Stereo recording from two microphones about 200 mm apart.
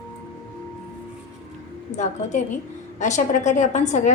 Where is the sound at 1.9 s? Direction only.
35° left (ahead or behind).